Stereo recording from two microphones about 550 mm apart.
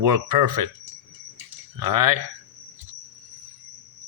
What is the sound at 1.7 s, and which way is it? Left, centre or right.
Speech, right.